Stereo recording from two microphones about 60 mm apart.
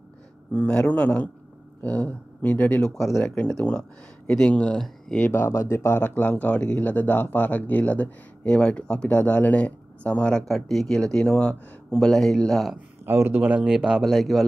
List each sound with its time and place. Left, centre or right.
0.5 s speech: centre
2.8 s speech: centre
3.3 s speech: centre
5.5 s speech: left
5.9 s speech: left
6.6 s speech: left
10.5 s speech: centre
13.0 s speech: right
13.4 s speech: centre
14.0 s speech: centre